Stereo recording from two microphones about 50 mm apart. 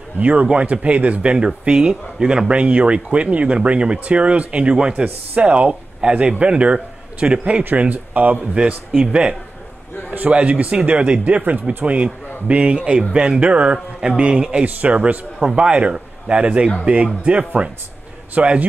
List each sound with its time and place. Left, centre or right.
0.2 s speech: right
7.6 s speech: right
8.6 s speech: centre